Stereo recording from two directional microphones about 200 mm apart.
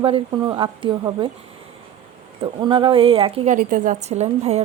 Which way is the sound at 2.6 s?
25° right (ahead or behind).